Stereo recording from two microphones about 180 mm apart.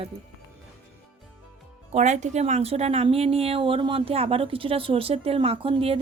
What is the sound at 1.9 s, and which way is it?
A woman's voice, 40° right (ahead or behind).